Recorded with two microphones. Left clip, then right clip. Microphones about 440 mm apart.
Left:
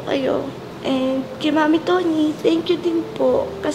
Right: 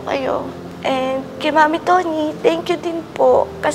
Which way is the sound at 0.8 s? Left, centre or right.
Right.